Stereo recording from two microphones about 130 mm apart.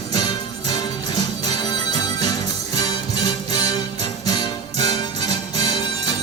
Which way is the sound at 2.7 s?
30° left (ahead or behind).